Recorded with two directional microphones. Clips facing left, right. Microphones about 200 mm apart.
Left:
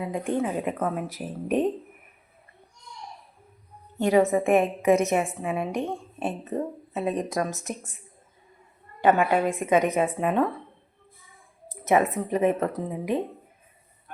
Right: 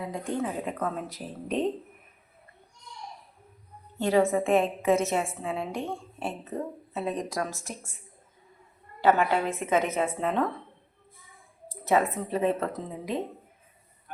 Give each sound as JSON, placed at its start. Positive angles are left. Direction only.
{"t": 0.3, "sound": "a woman's voice", "side_deg": 20}
{"t": 3.9, "sound": "a woman's voice", "side_deg": 15}
{"t": 9.0, "sound": "speech", "side_deg": 15}
{"t": 11.7, "sound": "speech", "side_deg": 20}